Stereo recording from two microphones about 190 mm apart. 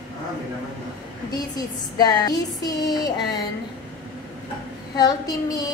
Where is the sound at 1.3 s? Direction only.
20° left (ahead or behind).